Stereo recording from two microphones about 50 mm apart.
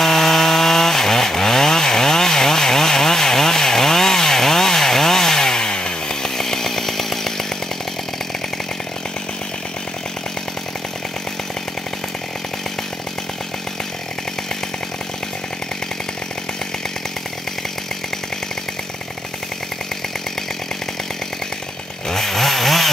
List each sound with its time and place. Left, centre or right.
0.0 s chainsaw: centre
22.1 s chainsaw: centre